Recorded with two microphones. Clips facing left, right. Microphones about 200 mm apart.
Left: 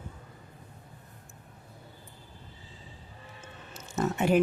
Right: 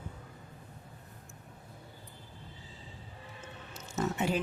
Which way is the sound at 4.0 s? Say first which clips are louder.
Left 6 dB; 60° left (ahead or behind).